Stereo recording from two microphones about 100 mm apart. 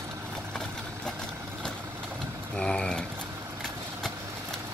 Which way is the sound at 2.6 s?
10° left (ahead or behind).